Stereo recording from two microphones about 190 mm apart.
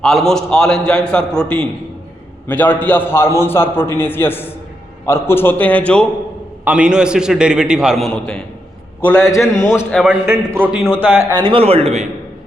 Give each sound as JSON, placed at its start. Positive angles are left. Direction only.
{"t": 0.0, "sound": "a man's voice", "side_deg": 0}
{"t": 6.7, "sound": "a man's voice", "side_deg": -5}
{"t": 10.0, "sound": "a man's voice", "side_deg": -5}
{"t": 11.3, "sound": "a man's voice", "side_deg": -25}